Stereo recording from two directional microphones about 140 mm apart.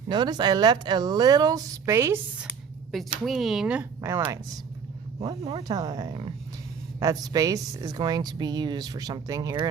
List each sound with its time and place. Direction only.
0.1 s speech: 30° right (ahead or behind)
2.9 s speech: centre (ahead or behind)
4.0 s speech: 20° right (ahead or behind)